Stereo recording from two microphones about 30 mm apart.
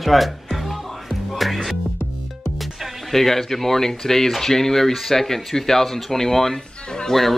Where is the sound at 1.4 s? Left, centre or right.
Centre.